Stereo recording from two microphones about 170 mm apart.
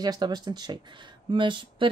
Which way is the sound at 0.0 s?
25° right (ahead or behind).